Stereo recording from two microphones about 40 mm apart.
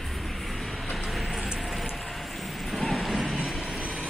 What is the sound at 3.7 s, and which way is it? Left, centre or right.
Vehicle, right.